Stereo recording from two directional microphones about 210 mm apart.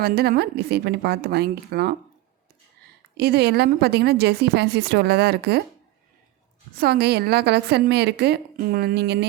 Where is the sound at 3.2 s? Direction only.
50° right (ahead or behind).